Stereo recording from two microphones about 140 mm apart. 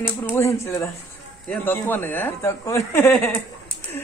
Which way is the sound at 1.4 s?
10° left (ahead or behind).